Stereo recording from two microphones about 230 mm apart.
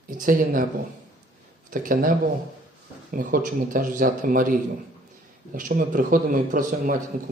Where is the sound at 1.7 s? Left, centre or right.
Right.